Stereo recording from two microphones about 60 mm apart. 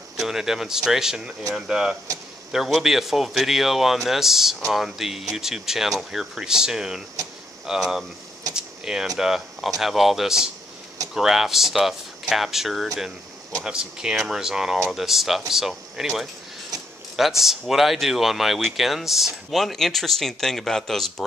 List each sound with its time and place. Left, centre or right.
0.2 s speech: centre
16.7 s a sound: right
17.2 s speech: centre